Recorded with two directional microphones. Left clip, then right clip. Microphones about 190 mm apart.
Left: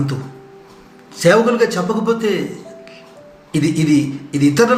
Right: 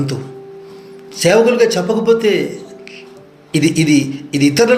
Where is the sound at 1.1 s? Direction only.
15° right (ahead or behind).